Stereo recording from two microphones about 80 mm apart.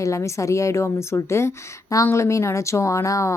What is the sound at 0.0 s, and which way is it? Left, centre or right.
A woman's voice, left.